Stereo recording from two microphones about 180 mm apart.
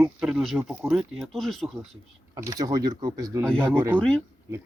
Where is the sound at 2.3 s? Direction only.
20° right (ahead or behind).